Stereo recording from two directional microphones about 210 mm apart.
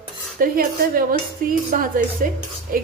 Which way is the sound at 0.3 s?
45° right (ahead or behind).